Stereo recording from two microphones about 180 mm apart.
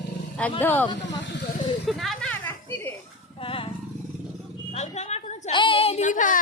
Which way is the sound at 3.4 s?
30° left (ahead or behind).